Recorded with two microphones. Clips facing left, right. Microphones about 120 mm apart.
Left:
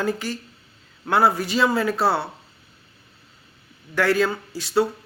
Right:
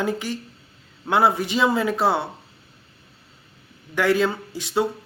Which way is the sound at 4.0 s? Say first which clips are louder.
Even; 20° right (ahead or behind).